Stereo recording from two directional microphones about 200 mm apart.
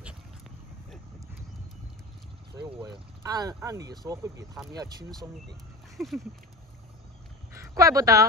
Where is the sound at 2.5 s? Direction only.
20° right (ahead or behind).